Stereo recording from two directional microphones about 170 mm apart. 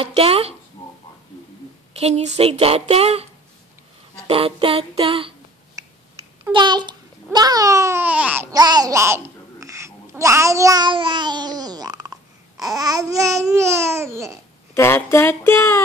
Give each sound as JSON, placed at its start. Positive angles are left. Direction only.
{"t": 0.0, "sound": "speech", "side_deg": -35}
{"t": 2.0, "sound": "speech", "side_deg": -40}
{"t": 4.3, "sound": "speech", "side_deg": -35}
{"t": 5.8, "sound": "a sound", "side_deg": -20}
{"t": 6.5, "sound": "a child's voice", "side_deg": -25}
{"t": 8.5, "sound": "a child's voice", "side_deg": -25}
{"t": 14.7, "sound": "speech", "side_deg": 15}